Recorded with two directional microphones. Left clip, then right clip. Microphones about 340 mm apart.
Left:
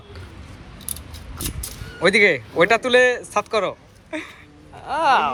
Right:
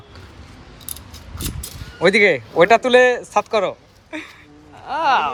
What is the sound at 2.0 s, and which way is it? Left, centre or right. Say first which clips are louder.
Speech: right 2 dB; centre.